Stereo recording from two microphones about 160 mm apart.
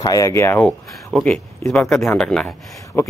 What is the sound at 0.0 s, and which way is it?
A man's voice, 20° left (ahead or behind).